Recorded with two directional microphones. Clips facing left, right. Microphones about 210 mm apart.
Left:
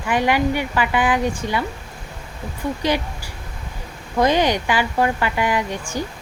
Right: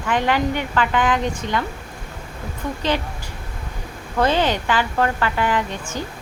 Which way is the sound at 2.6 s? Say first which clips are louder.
Left 3 dB; 10° left (ahead or behind).